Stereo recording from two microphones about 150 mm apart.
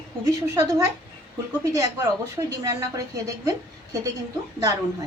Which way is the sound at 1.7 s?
20° right (ahead or behind).